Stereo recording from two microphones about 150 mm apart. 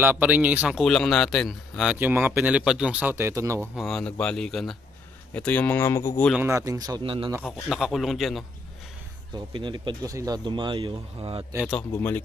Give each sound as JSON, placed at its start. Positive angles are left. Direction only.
{"t": 0.0, "sound": "a man's voice", "side_deg": -10}
{"t": 2.0, "sound": "speech", "side_deg": -15}
{"t": 3.7, "sound": "a man's voice", "side_deg": 5}
{"t": 6.3, "sound": "speech", "side_deg": -15}
{"t": 7.0, "sound": "speech", "side_deg": -35}
{"t": 7.4, "sound": "a man's voice", "side_deg": -5}
{"t": 9.5, "sound": "speech", "side_deg": -30}
{"t": 11.7, "sound": "speech", "side_deg": 10}